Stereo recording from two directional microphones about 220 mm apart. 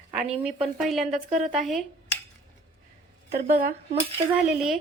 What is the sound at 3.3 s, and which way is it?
Speech, 40° right (ahead or behind).